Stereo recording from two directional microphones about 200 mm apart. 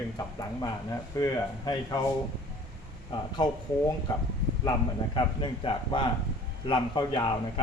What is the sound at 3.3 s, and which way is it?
Speech, 20° left (ahead or behind).